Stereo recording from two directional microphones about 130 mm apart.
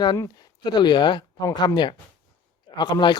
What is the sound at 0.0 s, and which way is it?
A man's voice, 30° left (ahead or behind).